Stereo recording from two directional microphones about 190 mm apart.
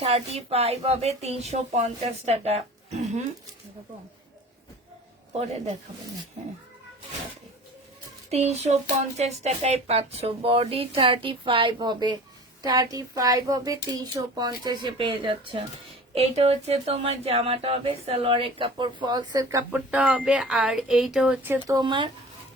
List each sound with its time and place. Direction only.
0.0 s speech: 35° right (ahead or behind)
5.3 s speech: 35° right (ahead or behind)
8.3 s speech: 35° right (ahead or behind); by 19.8 s 15° right (ahead or behind)
19.9 s speech: 5° right (ahead or behind); by 22.1 s 25° right (ahead or behind)